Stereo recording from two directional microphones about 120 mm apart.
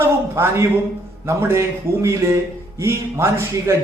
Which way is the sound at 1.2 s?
20° right (ahead or behind).